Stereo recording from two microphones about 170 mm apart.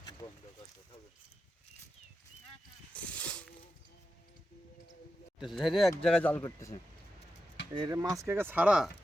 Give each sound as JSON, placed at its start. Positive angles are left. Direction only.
{"t": 2.9, "sound": "a sound", "side_deg": 10}
{"t": 5.4, "sound": "speech", "side_deg": 0}
{"t": 6.4, "sound": "speech", "side_deg": 20}
{"t": 7.8, "sound": "speech", "side_deg": -20}